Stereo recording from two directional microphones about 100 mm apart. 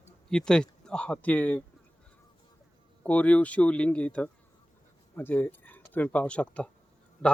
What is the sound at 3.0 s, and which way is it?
Speech, 15° left (ahead or behind).